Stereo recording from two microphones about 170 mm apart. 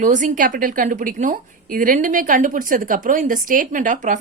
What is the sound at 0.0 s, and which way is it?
Speech, 50° right (ahead or behind).